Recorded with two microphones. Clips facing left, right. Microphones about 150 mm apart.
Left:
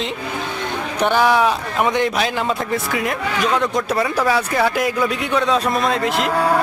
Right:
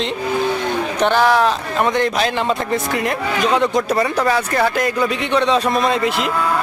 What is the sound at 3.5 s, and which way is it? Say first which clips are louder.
Speech: right 4 dB; centre (ahead or behind).